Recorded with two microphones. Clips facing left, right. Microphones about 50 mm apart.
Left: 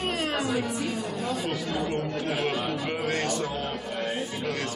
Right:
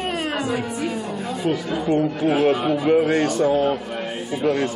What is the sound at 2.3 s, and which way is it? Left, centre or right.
Speech, centre.